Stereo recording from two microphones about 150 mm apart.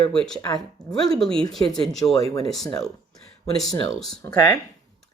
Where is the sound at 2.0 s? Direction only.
25° left (ahead or behind).